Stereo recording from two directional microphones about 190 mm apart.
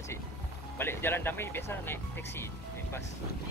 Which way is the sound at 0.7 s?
10° left (ahead or behind).